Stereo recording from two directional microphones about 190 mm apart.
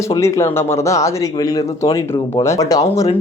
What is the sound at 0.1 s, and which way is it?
Speech, 15° left (ahead or behind).